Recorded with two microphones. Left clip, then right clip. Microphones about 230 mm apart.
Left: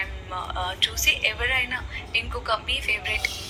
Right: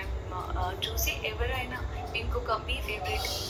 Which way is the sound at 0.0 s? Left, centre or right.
Left.